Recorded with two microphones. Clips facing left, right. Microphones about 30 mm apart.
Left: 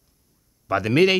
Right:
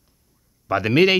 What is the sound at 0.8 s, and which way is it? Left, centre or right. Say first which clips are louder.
Speech: right 2 dB; centre.